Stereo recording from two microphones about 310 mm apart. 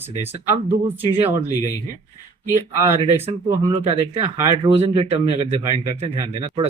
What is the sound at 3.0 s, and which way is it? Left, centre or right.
Speech, centre.